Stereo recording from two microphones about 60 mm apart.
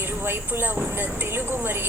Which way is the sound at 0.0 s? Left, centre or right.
Right.